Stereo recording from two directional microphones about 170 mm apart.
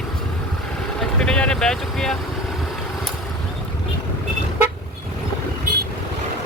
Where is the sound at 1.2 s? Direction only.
5° left (ahead or behind).